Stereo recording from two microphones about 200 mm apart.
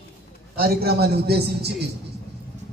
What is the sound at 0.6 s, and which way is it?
A man's voice, 50° right (ahead or behind).